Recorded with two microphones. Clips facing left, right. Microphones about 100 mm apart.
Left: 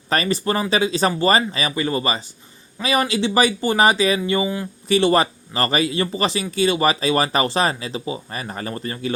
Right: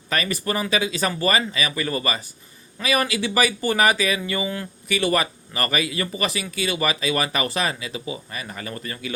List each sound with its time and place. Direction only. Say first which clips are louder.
0.1 s speech: left 4 dB; 30° left (ahead or behind)
4.4 s speech: left 4 dB; 15° left (ahead or behind)
4.9 s speech: left 5 dB; 30° left (ahead or behind)